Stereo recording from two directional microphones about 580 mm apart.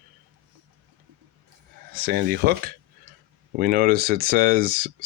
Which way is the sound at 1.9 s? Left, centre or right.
Centre.